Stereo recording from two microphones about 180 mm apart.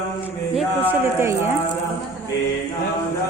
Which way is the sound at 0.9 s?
15° right (ahead or behind).